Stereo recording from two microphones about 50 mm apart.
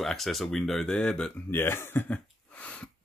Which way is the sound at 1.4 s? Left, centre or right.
Left.